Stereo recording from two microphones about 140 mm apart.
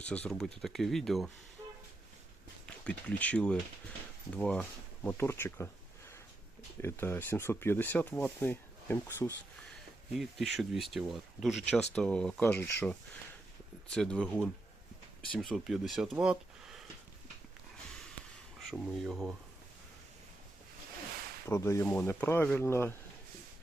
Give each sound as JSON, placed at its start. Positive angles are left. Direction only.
{"t": 0.0, "sound": "speech", "side_deg": 10}
{"t": 1.6, "sound": "train", "side_deg": -30}
{"t": 2.6, "sound": "speech", "side_deg": 10}
{"t": 5.0, "sound": "speech", "side_deg": 20}
{"t": 6.8, "sound": "speech", "side_deg": 15}
{"t": 10.2, "sound": "speech", "side_deg": 0}
{"t": 11.7, "sound": "speech", "side_deg": 10}
{"t": 13.9, "sound": "speech", "side_deg": 5}
{"t": 18.6, "sound": "speech", "side_deg": -5}
{"t": 21.5, "sound": "speech", "side_deg": 20}